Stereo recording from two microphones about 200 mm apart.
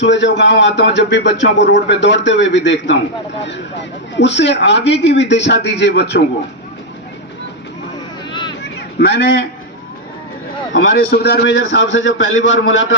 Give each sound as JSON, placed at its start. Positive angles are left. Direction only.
{"t": 0.0, "sound": "speech", "side_deg": 60}
{"t": 4.2, "sound": "speech", "side_deg": 65}
{"t": 8.3, "sound": "vehicle", "side_deg": 25}
{"t": 9.0, "sound": "speech", "side_deg": 60}
{"t": 10.7, "sound": "a man's voice", "side_deg": 65}